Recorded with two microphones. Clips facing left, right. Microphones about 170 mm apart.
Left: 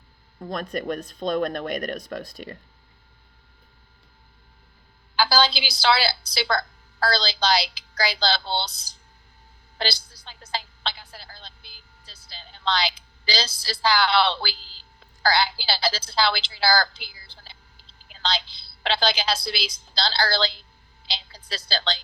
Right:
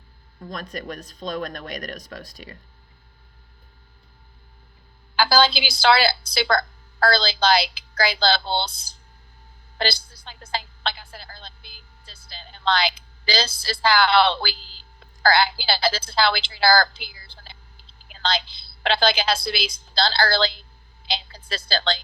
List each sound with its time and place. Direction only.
0.7 s speech: 55° left (ahead or behind)
0.9 s speech: 40° right (ahead or behind)
1.2 s speech: 55° left (ahead or behind)
5.1 s a woman's voice: 55° right (ahead or behind)
9.7 s a sound: 55° right (ahead or behind)
13.2 s a woman's voice: 55° right (ahead or behind)